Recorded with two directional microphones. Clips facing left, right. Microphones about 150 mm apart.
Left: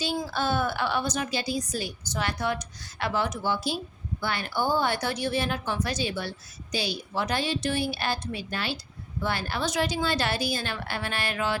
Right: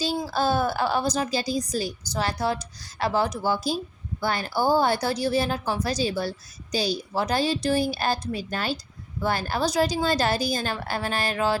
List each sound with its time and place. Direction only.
0.0 s a woman's voice: 35° right (ahead or behind)